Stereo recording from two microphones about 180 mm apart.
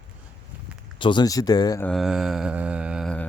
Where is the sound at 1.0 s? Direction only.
25° left (ahead or behind).